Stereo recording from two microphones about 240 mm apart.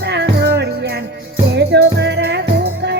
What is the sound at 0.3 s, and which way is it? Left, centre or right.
Music, right.